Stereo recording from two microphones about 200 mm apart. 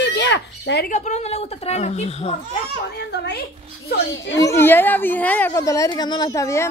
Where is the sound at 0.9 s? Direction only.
35° left (ahead or behind).